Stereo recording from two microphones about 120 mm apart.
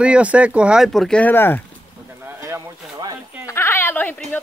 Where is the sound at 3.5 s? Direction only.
20° left (ahead or behind).